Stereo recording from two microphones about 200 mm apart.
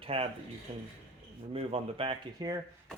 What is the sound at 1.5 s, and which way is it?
Speech, 30° right (ahead or behind).